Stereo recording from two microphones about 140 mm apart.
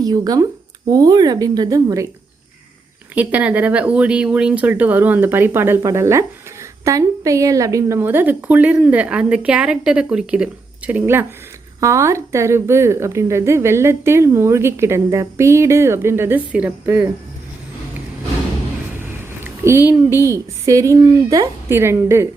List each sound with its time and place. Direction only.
0.0 s a woman's voice: 25° right (ahead or behind)
3.2 s a woman's voice: 10° right (ahead or behind)
19.6 s a woman's voice: 20° right (ahead or behind)